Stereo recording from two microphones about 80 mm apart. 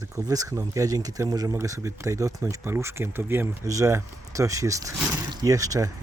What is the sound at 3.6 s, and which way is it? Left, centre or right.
Speech, right.